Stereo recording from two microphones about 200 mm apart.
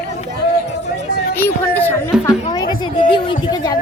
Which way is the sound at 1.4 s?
10° left (ahead or behind).